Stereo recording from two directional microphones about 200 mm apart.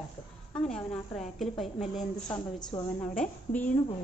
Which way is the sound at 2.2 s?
20° left (ahead or behind).